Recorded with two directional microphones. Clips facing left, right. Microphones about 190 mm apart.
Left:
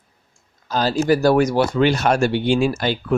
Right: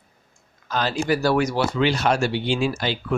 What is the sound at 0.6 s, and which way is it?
Speech, 35° left (ahead or behind).